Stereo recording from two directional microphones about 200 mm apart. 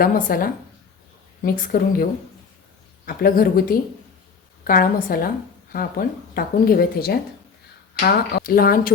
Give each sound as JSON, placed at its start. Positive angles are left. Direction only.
{"t": 0.0, "sound": "a woman's voice", "side_deg": 45}
{"t": 3.1, "sound": "a woman's voice", "side_deg": 45}